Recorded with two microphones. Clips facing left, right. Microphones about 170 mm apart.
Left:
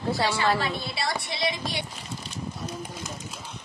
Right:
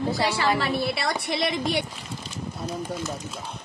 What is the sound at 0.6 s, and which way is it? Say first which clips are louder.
A woman's voice: right 4 dB; 65° right (ahead or behind).